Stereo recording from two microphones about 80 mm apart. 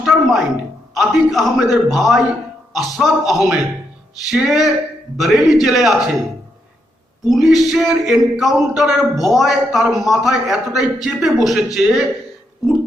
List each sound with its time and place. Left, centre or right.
0.0 s a sound: centre
0.9 s a man's voice: centre
7.3 s a man's voice: centre